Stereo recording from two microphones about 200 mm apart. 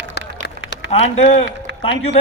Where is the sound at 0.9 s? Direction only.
30° left (ahead or behind).